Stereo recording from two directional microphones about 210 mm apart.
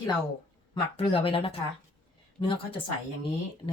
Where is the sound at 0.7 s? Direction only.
25° left (ahead or behind).